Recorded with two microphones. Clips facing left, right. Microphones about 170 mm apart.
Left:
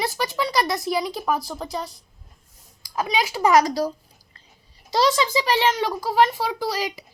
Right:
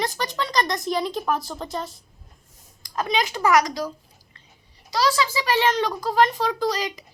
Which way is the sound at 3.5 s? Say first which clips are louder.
Left 3 dB; 30° left (ahead or behind).